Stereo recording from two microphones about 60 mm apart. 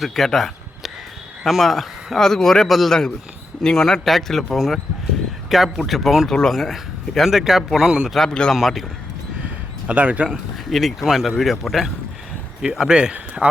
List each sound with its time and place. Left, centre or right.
0.0 s speech: centre
8.1 s speech: centre
8.5 s speech: centre
9.8 s speech: right
10.7 s speech: centre